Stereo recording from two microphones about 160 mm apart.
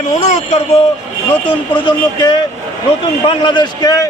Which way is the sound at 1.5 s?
30° left (ahead or behind).